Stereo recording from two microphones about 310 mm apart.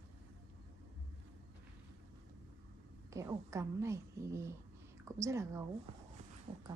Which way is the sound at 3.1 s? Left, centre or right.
Centre.